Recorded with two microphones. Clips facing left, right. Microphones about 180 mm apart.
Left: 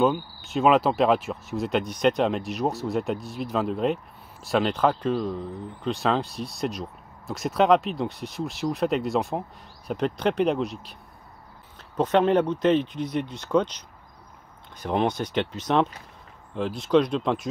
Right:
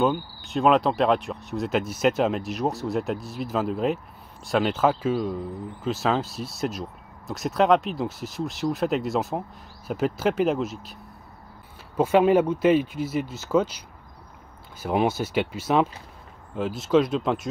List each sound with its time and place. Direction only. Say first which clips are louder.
0.0 s speech: left 1 dB; centre (ahead or behind)
12.0 s speech: right 2 dB; 10° right (ahead or behind)